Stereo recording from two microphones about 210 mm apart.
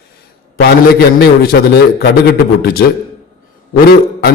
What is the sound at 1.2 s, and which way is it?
A man's voice, 50° left (ahead or behind).